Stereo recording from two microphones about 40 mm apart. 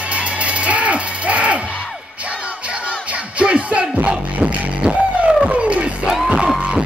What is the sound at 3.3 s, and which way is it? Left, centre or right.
Music, right.